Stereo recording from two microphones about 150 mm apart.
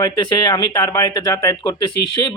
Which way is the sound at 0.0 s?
30° left (ahead or behind).